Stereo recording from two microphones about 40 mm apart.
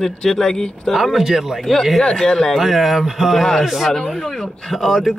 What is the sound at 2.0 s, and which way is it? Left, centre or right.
Speech, centre.